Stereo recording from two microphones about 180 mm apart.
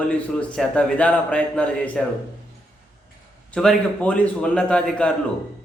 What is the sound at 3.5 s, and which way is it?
A man's voice, 5° left (ahead or behind).